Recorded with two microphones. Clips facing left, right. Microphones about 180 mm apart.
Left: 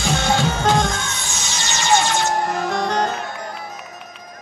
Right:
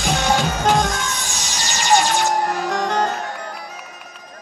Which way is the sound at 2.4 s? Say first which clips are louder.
Even; 40° right (ahead or behind).